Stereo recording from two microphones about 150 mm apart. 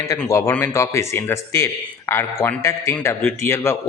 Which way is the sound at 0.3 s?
20° left (ahead or behind).